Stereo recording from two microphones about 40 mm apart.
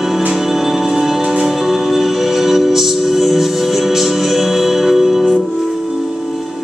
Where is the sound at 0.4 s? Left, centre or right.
Centre.